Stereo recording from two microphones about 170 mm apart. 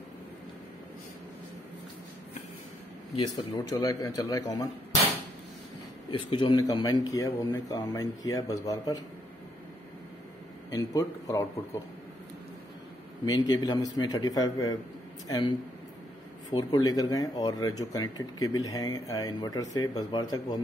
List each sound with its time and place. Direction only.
3.2 s speech: 20° left (ahead or behind)
6.3 s speech: 25° left (ahead or behind)
10.7 s speech: 20° left (ahead or behind)
13.5 s speech: 20° left (ahead or behind)